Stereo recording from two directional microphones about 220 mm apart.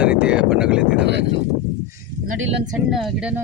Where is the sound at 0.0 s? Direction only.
5° right (ahead or behind).